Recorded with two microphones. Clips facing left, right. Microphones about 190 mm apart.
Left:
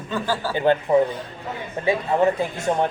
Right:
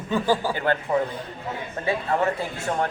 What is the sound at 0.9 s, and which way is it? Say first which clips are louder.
Speech: left 6 dB; 15° left (ahead or behind).